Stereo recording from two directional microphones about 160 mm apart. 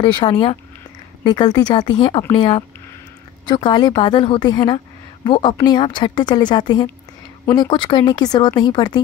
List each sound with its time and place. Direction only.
0.0 s a woman's voice: 30° left (ahead or behind)